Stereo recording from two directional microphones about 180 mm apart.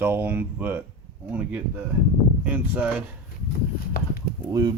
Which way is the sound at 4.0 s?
55° left (ahead or behind).